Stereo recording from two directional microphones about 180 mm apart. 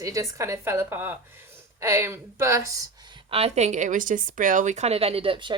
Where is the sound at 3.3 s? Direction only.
35° right (ahead or behind).